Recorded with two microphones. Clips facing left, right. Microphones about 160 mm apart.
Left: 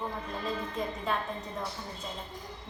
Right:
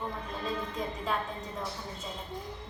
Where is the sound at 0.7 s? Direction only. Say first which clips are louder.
Left 1 dB; centre (ahead or behind).